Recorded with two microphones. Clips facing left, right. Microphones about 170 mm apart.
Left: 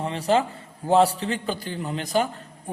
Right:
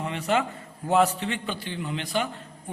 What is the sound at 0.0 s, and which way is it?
A man's voice, 35° left (ahead or behind).